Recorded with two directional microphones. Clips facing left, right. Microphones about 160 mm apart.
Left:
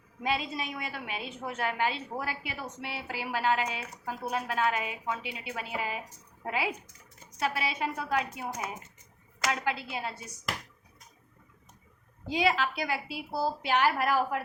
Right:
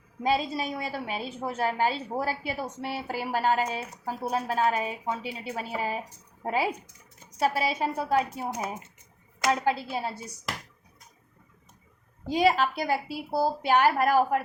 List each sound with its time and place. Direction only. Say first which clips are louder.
0.2 s a woman's voice: right 5 dB; 35° right (ahead or behind)
12.3 s a woman's voice: right 5 dB; 45° right (ahead or behind)